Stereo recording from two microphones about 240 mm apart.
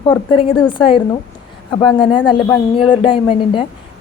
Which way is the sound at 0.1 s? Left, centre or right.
Left.